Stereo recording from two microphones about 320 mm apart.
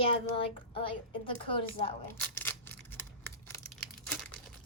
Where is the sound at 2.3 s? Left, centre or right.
Centre.